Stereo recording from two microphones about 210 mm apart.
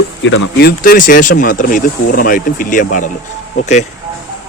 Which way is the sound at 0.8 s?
40° left (ahead or behind).